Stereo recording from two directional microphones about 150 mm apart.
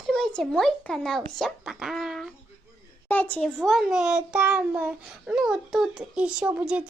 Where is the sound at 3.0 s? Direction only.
10° left (ahead or behind).